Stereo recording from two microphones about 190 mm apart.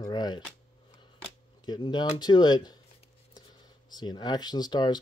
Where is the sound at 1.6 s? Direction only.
25° left (ahead or behind).